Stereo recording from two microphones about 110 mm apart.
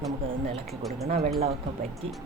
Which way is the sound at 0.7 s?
Centre (ahead or behind).